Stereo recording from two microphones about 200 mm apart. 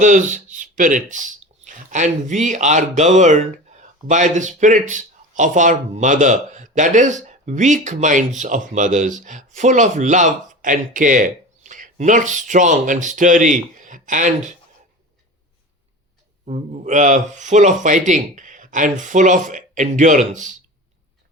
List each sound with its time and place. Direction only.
0.0 s speech: 40° right (ahead or behind)
16.5 s speech: 35° right (ahead or behind)